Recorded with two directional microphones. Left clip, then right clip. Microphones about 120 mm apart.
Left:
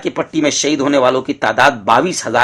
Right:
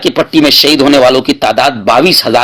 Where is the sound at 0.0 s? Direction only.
30° right (ahead or behind).